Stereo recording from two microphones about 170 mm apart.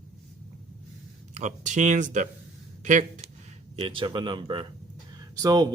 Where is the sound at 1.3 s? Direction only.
45° right (ahead or behind).